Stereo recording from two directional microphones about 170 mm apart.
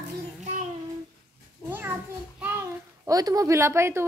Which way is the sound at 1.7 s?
10° right (ahead or behind).